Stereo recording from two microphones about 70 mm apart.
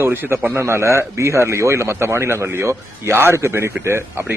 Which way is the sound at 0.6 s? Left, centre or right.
Right.